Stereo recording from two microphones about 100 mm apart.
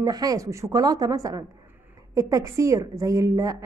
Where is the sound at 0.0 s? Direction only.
40° right (ahead or behind).